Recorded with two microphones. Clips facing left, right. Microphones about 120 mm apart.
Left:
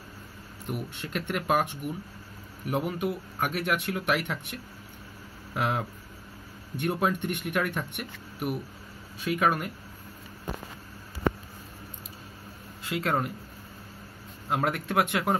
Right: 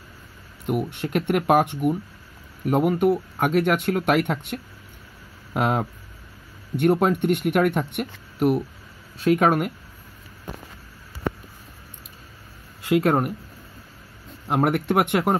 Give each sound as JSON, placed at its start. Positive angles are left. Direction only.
{"t": 0.7, "sound": "speech", "side_deg": -60}
{"t": 12.8, "sound": "speech", "side_deg": -70}
{"t": 14.5, "sound": "speech", "side_deg": -70}